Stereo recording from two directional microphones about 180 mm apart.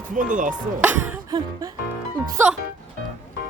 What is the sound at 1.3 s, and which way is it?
Music, 20° right (ahead or behind).